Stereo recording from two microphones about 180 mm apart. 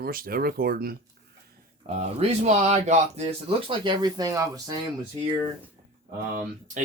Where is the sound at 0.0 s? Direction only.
55° right (ahead or behind).